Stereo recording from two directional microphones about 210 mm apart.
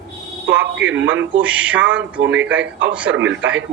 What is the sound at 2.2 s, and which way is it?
A man's voice, 60° right (ahead or behind).